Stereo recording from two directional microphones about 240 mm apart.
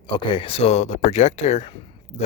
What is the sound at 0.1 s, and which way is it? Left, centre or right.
Speech, left.